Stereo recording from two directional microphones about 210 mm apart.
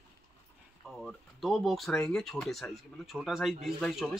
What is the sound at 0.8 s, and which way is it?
Speech, centre (ahead or behind).